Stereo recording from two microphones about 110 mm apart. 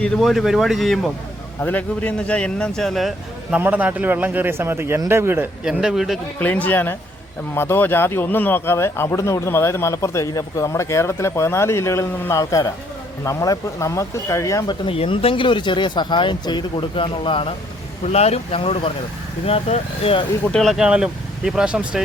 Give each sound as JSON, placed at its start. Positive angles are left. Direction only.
{"t": 0.2, "sound": "speech", "side_deg": 0}
{"t": 1.6, "sound": "a man's voice", "side_deg": 15}
{"t": 3.6, "sound": "a man's voice", "side_deg": -15}
{"t": 5.6, "sound": "speech", "side_deg": -5}
{"t": 6.4, "sound": "a man's voice", "side_deg": 15}
{"t": 14.8, "sound": "speech", "side_deg": 60}
{"t": 18.0, "sound": "speech", "side_deg": 75}
{"t": 20.4, "sound": "speech", "side_deg": 5}